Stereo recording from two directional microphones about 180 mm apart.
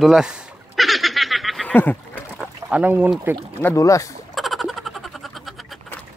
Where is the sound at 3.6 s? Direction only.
20° left (ahead or behind).